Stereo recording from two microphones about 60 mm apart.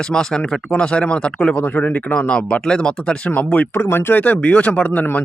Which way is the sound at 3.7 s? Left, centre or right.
Left.